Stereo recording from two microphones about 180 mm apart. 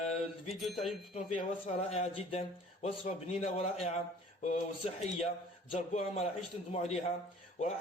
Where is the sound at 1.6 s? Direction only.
35° left (ahead or behind).